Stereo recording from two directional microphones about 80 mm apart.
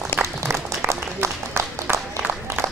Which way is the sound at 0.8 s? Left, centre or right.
Right.